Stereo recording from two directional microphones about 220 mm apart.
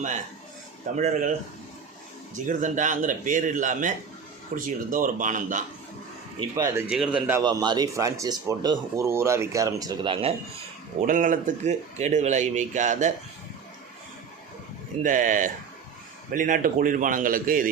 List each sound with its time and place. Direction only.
0.9 s speech: 35° right (ahead or behind)
2.3 s speech: 35° right (ahead or behind)
6.6 s speech: 10° right (ahead or behind)
7.4 s speech: 20° right (ahead or behind)
11.0 s speech: 40° right (ahead or behind)
15.0 s speech: 35° right (ahead or behind)